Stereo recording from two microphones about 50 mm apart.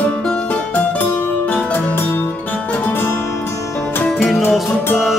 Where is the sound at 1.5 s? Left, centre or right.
Left.